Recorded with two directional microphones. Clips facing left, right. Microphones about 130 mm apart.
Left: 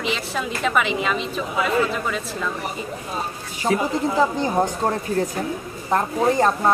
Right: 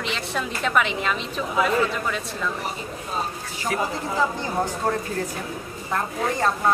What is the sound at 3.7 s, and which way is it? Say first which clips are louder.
Speech: left 5 dB; 30° left (ahead or behind).